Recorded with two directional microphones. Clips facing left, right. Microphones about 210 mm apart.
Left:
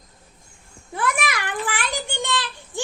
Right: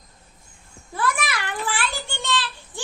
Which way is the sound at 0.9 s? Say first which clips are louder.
Left 1 dB; 15° left (ahead or behind).